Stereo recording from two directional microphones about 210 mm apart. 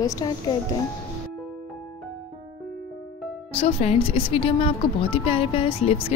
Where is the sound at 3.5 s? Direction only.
30° left (ahead or behind).